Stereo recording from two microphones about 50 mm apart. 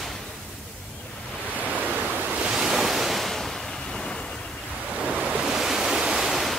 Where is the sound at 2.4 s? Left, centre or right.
Centre.